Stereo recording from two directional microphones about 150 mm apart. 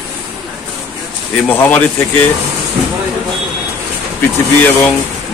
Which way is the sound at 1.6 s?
10° left (ahead or behind).